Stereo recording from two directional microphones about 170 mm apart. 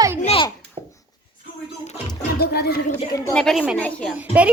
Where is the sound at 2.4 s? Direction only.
70° left (ahead or behind).